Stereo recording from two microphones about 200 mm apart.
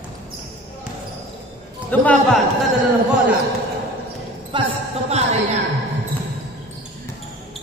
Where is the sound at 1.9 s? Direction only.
5° left (ahead or behind).